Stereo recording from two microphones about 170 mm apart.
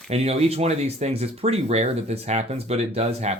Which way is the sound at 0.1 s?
35° right (ahead or behind).